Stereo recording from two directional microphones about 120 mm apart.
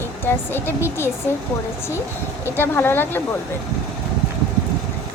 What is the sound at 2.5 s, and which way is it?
Speech, 20° left (ahead or behind).